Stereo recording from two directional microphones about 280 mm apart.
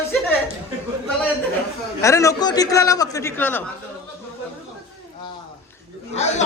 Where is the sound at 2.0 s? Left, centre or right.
Centre.